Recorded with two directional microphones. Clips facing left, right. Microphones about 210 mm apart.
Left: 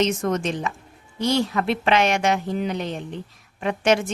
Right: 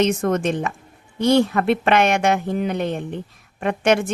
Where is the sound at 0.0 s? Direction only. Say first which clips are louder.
Right 3 dB; 55° right (ahead or behind).